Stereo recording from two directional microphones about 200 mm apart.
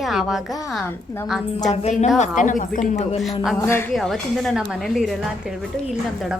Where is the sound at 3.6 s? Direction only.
15° left (ahead or behind).